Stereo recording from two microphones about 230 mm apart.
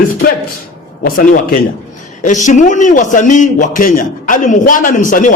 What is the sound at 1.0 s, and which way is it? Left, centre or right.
A man's voice, left.